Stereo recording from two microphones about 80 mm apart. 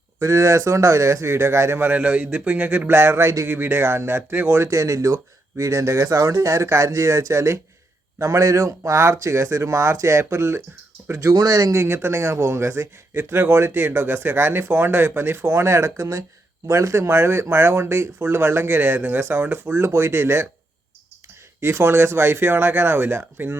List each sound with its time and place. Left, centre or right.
0.2 s speech: right
21.6 s speech: right